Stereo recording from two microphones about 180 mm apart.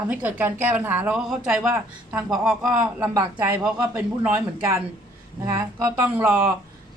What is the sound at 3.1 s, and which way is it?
A woman's voice, 20° right (ahead or behind).